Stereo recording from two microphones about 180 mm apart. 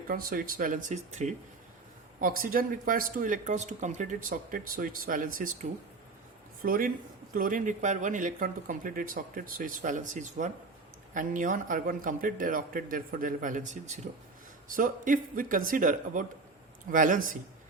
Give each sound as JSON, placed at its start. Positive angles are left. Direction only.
{"t": 0.1, "sound": "speech", "side_deg": -55}
{"t": 6.6, "sound": "speech", "side_deg": -55}